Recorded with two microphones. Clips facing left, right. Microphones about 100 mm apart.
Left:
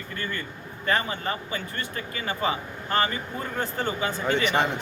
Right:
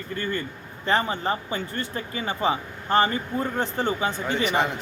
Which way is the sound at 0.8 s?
30° right (ahead or behind).